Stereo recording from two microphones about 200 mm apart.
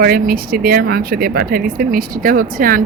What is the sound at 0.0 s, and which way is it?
Speech, 45° right (ahead or behind).